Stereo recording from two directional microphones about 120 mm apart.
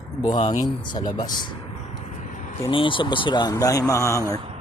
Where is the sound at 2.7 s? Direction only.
45° left (ahead or behind); by 4.2 s 25° left (ahead or behind).